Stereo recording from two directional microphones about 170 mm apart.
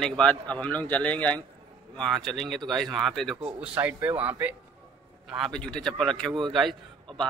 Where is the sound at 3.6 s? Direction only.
10° right (ahead or behind).